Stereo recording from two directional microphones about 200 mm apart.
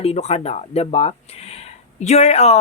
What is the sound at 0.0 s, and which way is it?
Speech, 30° left (ahead or behind).